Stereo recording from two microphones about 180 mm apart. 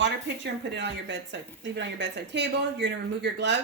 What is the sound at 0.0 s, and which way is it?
Speech, 80° right.